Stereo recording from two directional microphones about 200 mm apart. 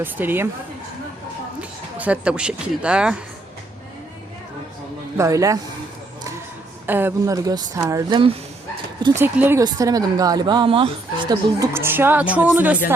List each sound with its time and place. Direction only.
0.0 s a woman's voice: 10° right (ahead or behind)
2.0 s speech: 5° right (ahead or behind)
5.1 s a woman's voice: 15° right (ahead or behind)
6.8 s a woman's voice: 10° right (ahead or behind)
9.2 s a woman's voice: 10° right (ahead or behind)